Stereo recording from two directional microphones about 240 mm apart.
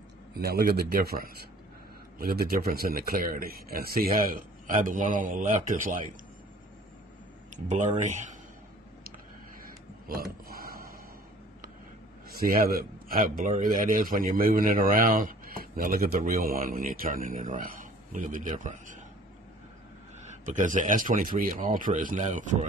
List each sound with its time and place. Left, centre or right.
0.4 s a man's voice: right
7.5 s a man's voice: right
10.0 s a sound: right
12.3 s a man's voice: right
20.2 s a man's voice: right